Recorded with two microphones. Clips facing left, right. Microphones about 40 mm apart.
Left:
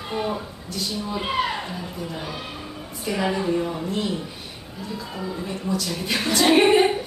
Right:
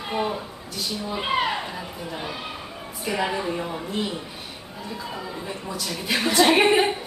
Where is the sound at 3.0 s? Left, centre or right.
Centre.